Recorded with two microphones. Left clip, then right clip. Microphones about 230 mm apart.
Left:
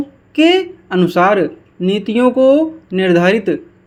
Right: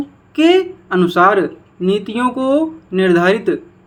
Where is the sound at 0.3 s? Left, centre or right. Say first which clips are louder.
Even; left.